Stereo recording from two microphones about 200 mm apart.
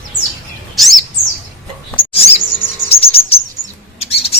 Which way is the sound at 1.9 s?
30° left (ahead or behind).